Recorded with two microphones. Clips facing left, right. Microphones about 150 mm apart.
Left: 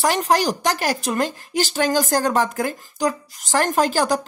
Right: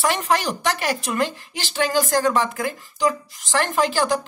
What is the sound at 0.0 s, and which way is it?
Speech, 40° left (ahead or behind).